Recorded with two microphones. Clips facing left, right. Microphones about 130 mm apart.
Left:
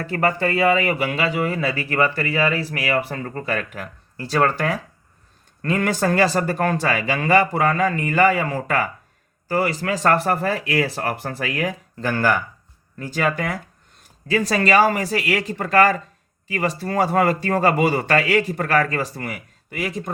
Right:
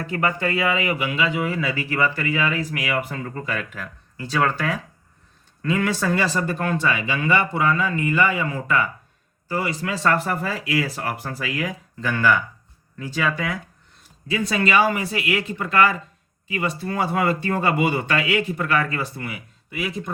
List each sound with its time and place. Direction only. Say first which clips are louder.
0.1 s speech: left 3 dB; 35° left (ahead or behind); by 11.8 s 55° left (ahead or behind)
11.9 s speech: even; 40° left (ahead or behind)
13.0 s speech: left 2 dB; 50° left (ahead or behind)